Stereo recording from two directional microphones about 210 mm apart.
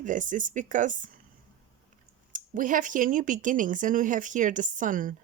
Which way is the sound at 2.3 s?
40° right (ahead or behind).